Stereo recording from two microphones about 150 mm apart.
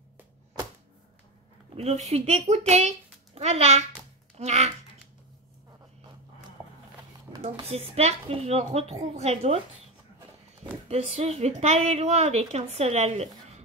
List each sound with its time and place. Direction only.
1.8 s a woman's voice: 45° right (ahead or behind)
7.6 s a woman's voice: 45° right (ahead or behind)
10.9 s a woman's voice: 45° right (ahead or behind)